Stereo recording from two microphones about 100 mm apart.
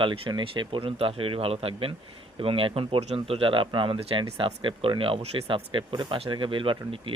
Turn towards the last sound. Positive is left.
turn(degrees=-60)  # may be behind; listen again after turning